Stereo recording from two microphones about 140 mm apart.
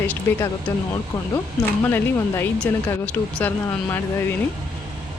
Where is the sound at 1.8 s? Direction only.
20° left (ahead or behind).